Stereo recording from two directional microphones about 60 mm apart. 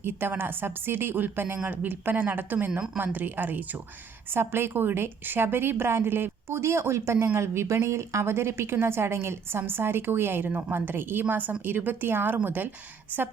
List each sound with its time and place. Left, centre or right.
0.0 s a woman's voice: right
4.3 s a woman's voice: right